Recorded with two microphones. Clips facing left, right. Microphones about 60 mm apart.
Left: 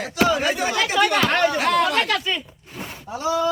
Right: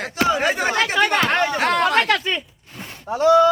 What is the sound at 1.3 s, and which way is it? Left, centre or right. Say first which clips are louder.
Chatter: even; right.